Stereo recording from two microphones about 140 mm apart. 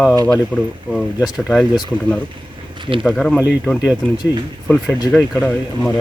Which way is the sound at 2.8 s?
40° right (ahead or behind).